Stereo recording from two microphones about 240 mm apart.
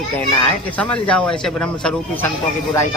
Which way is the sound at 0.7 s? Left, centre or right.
Centre.